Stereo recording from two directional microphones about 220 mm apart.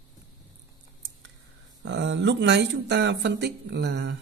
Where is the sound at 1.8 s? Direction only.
55° right (ahead or behind).